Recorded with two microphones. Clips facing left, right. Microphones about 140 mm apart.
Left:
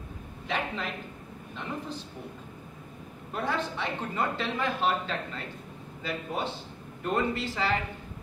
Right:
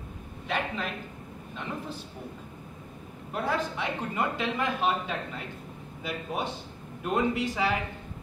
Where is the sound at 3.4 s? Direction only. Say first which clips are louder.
Right 1 dB; 10° right (ahead or behind).